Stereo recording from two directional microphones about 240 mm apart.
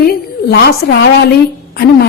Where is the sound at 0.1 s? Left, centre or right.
Left.